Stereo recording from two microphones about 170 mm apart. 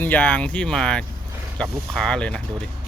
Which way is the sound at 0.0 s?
10° left (ahead or behind).